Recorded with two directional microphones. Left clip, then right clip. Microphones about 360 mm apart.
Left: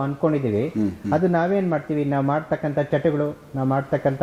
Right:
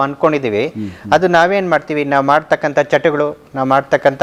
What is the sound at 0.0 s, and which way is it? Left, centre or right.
A man's voice, centre.